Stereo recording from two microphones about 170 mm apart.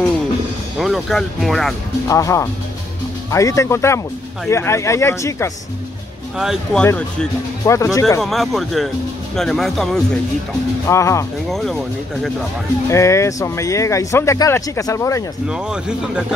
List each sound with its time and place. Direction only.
0.7 s speech: centre (ahead or behind)
2.0 s speech: 20° left (ahead or behind)
6.3 s speech: 5° right (ahead or behind)
6.8 s speech: 10° left (ahead or behind)
8.2 s speech: centre (ahead or behind)
10.9 s speech: 15° left (ahead or behind)
11.4 s speech: centre (ahead or behind)
12.8 s speech: 15° left (ahead or behind)
15.4 s speech: 5° right (ahead or behind)